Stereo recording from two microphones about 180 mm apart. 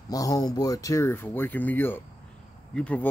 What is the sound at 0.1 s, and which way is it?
Speech, 20° left (ahead or behind).